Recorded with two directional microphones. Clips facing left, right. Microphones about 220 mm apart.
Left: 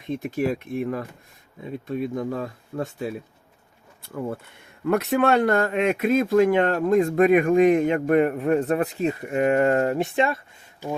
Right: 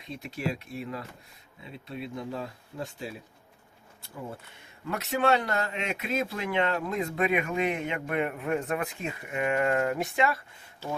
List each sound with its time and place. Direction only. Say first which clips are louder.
0.1 s speech: left 9 dB; 50° left (ahead or behind); by 10.4 s 25° left (ahead or behind)
10.8 s speech: left 5 dB; 15° left (ahead or behind)